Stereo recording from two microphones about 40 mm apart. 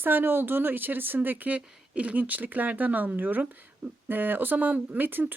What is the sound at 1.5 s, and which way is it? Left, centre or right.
A woman's voice, right.